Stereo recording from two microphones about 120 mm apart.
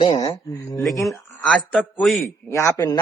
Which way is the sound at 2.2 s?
25° left (ahead or behind).